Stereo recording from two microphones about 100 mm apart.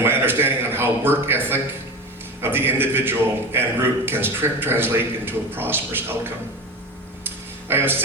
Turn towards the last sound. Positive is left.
turn(degrees=-20)  # may be behind; listen again after turning